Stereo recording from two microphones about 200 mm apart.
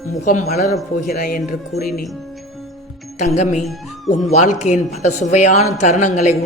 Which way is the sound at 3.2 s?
35° left (ahead or behind).